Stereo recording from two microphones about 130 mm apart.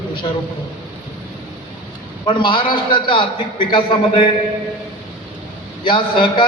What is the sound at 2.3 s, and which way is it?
A man's voice, 40° left (ahead or behind).